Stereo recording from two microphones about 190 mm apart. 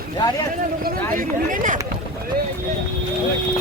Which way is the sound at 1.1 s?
45° right (ahead or behind).